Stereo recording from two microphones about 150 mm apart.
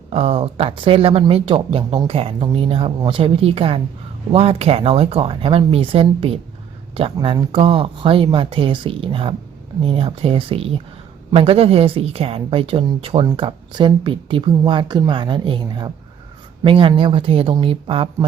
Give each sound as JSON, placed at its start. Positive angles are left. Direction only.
{"t": 0.1, "sound": "speech", "side_deg": -40}